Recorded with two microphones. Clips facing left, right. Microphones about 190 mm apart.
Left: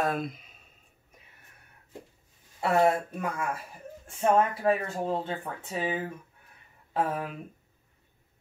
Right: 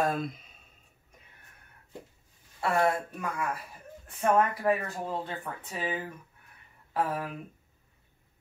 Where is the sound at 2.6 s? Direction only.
20° left (ahead or behind).